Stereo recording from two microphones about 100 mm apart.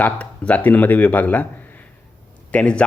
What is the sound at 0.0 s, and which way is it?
A man's voice, 15° left (ahead or behind).